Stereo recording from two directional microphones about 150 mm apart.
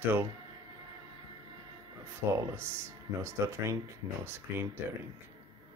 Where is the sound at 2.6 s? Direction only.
20° right (ahead or behind).